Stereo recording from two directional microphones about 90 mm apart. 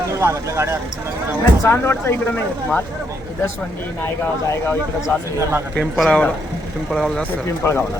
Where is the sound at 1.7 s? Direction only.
25° left (ahead or behind).